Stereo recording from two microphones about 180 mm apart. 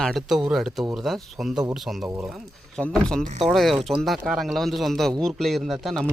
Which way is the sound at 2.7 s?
5° left (ahead or behind).